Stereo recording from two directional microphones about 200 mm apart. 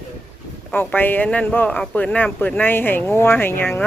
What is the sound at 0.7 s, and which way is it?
A man's voice, 10° left (ahead or behind).